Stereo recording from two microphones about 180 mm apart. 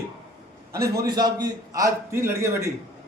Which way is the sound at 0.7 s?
20° right (ahead or behind).